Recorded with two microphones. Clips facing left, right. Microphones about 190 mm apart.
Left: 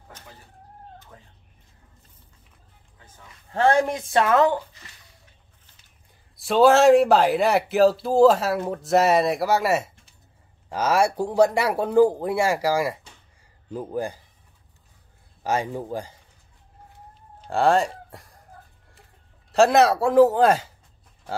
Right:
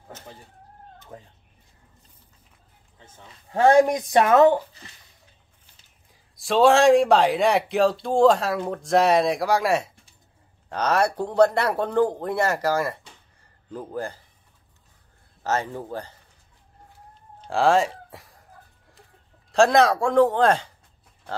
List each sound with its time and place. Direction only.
3.0 s speech: 25° right (ahead or behind)
3.5 s a woman's voice: 15° right (ahead or behind)
6.3 s a man's voice: centre (ahead or behind)
15.4 s speech: 15° left (ahead or behind)
17.4 s a sound: centre (ahead or behind)
19.5 s a man's voice: 5° left (ahead or behind)